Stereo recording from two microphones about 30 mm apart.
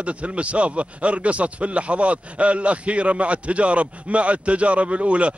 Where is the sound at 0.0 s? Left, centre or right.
Right.